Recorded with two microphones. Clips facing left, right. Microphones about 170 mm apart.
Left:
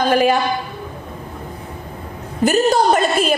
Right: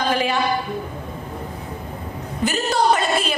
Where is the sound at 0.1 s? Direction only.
50° left (ahead or behind).